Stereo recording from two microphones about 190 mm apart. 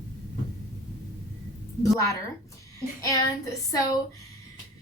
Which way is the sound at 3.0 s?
15° left (ahead or behind).